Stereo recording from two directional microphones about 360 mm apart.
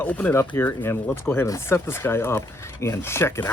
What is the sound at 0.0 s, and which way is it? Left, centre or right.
Speech, centre.